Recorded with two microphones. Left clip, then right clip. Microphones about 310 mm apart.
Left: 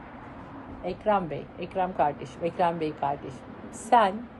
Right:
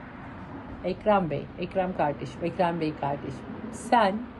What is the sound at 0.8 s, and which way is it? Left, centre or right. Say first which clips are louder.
A woman's voice: right 2 dB; centre.